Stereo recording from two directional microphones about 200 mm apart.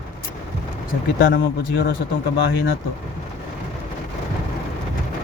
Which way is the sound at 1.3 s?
55° left (ahead or behind).